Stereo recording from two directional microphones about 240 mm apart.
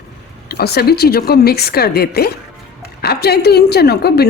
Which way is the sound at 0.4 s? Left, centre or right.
Left.